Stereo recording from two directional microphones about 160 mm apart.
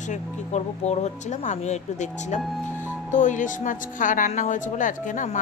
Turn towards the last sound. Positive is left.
turn(degrees=50)  # may be behind; listen again after turning